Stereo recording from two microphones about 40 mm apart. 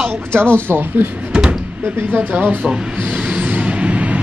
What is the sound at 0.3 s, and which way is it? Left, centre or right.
Speech, left.